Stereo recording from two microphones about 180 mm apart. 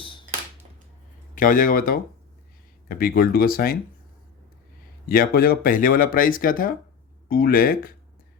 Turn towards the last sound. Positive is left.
turn(degrees=55)  # may be behind; listen again after turning